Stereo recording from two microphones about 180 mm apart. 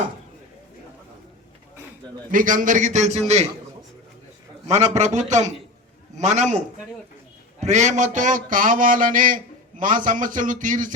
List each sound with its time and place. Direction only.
2.3 s a man's voice: 45° right (ahead or behind)
4.7 s a man's voice: 40° right (ahead or behind)
7.6 s a man's voice: 40° right (ahead or behind)